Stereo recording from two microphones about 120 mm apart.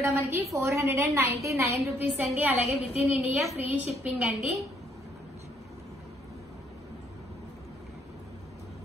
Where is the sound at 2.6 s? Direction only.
60° left (ahead or behind).